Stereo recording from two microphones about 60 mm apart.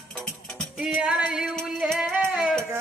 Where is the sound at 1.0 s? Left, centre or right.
Centre.